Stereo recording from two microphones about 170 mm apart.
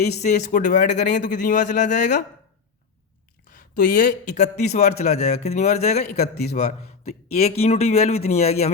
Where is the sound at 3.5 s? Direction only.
55° left (ahead or behind).